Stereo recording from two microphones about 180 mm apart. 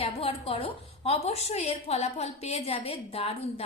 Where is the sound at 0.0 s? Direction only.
35° left (ahead or behind).